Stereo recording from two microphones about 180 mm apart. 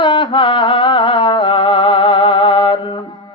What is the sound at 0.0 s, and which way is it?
Music, 25° left (ahead or behind).